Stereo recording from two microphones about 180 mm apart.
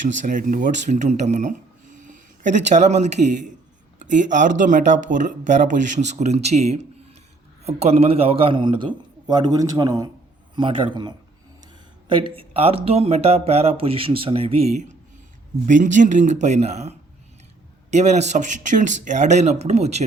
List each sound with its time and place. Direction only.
0.3 s speech: 45° right (ahead or behind)
2.0 s a sound: 45° right (ahead or behind)
2.7 s a man's voice: 40° right (ahead or behind)
17.9 s speech: 40° right (ahead or behind)